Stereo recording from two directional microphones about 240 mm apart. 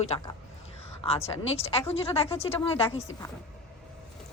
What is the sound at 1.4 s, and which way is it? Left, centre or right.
A woman's voice, left.